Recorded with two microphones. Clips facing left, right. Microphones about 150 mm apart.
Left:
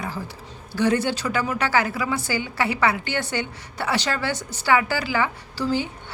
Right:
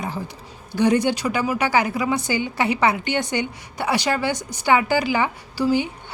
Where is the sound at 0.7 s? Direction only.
15° right (ahead or behind).